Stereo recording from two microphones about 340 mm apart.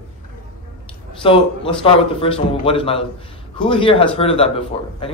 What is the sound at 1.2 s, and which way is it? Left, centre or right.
A man's voice, centre.